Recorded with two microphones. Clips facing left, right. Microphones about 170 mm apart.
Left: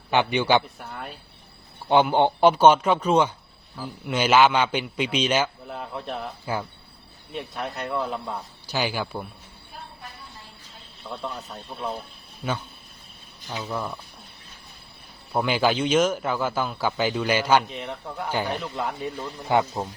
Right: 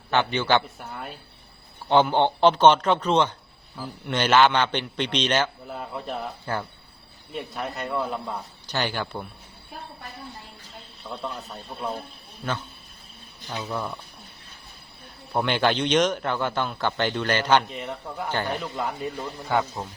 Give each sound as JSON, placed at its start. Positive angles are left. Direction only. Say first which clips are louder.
{"t": 0.1, "sound": "a man's voice", "louder": "left 1 dB", "side_deg": 15}
{"t": 0.8, "sound": "speech", "louder": "even", "side_deg": 0}
{"t": 1.9, "sound": "a man's voice", "louder": "left 1 dB", "side_deg": 10}
{"t": 5.6, "sound": "a man's voice", "louder": "even", "side_deg": 0}
{"t": 11.0, "sound": "a man's voice", "louder": "even", "side_deg": 5}
{"t": 13.5, "sound": "a man's voice", "louder": "even", "side_deg": 5}
{"t": 15.3, "sound": "a man's voice", "louder": "left 1 dB", "side_deg": 5}
{"t": 19.5, "sound": "speech", "louder": "left 3 dB", "side_deg": 20}